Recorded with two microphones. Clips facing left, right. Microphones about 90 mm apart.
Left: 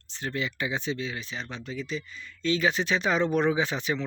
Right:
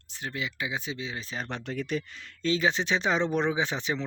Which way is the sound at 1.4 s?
60° right (ahead or behind).